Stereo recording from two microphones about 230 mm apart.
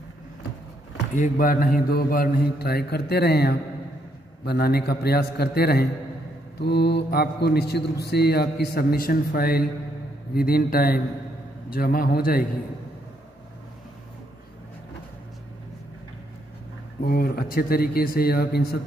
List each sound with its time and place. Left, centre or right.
1.1 s mantra: left
4.5 s a man's voice: left
10.3 s mantra: left
17.0 s mantra: left